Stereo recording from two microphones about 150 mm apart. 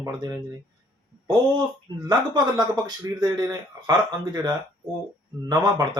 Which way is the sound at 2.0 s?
30° right (ahead or behind).